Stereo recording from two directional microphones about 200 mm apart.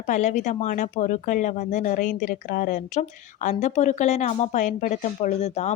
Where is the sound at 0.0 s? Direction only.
35° left (ahead or behind).